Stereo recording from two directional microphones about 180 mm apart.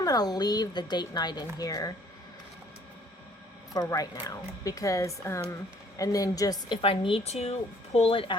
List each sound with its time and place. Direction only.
0.0 s a woman's voice: 20° left (ahead or behind)
3.8 s a woman's voice: 20° left (ahead or behind)